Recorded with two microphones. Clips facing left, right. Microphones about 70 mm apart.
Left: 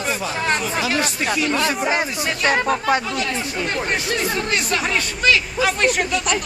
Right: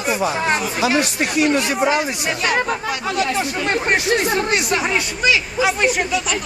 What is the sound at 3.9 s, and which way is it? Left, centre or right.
Speech, right.